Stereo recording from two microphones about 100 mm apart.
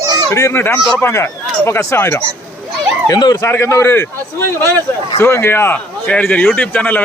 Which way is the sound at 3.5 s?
25° left (ahead or behind).